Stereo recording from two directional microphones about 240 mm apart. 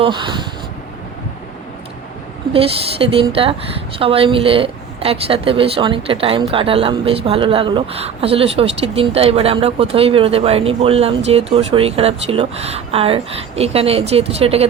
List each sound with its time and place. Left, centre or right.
0.0 s speech: centre
2.5 s speech: right